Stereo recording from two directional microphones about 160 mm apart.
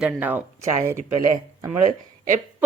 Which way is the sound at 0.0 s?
10° right (ahead or behind).